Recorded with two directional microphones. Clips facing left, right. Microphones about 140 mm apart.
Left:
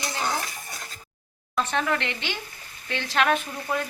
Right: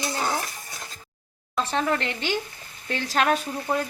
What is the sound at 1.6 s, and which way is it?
Speech, 30° right (ahead or behind).